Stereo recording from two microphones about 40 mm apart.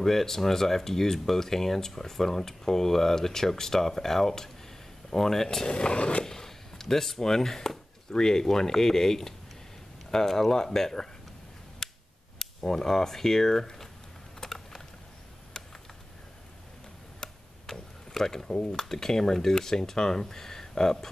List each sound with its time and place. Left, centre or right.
0.0 s speech: centre
5.7 s speech: left
6.2 s speech: centre
11.8 s a sound: centre
12.4 s speech: centre
14.4 s typing: centre
17.2 s tick-tock: centre
18.6 s speech: centre